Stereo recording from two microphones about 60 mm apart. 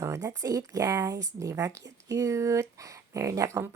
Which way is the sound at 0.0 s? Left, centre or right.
Right.